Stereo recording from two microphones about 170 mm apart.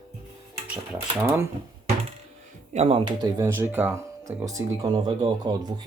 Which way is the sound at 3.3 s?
15° right (ahead or behind).